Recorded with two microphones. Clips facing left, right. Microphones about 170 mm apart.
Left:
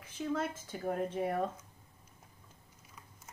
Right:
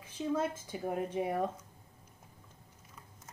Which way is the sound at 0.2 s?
15° right (ahead or behind).